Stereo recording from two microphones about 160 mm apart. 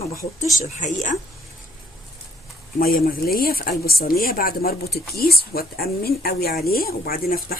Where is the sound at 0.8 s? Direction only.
50° left (ahead or behind).